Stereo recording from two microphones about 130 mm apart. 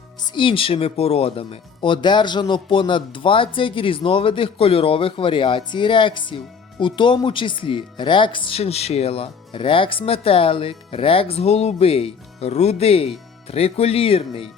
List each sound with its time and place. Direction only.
0.2 s speech: 35° left (ahead or behind)